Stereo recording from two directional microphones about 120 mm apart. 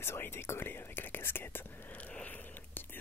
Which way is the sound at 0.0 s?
20° left (ahead or behind).